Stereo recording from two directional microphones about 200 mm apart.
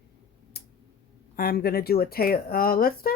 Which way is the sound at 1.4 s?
50° left (ahead or behind).